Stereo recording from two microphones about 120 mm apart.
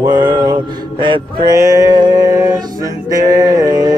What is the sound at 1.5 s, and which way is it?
Mantra, 30° right (ahead or behind).